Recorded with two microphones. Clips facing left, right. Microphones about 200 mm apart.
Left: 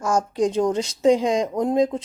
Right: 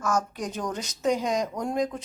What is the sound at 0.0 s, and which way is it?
A woman's voice, 30° left (ahead or behind).